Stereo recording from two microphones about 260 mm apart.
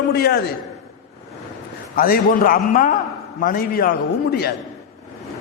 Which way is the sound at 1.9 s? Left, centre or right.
Left.